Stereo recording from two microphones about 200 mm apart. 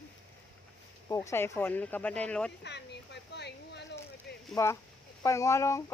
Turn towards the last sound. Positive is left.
turn(degrees=15)  # may be behind; listen again after turning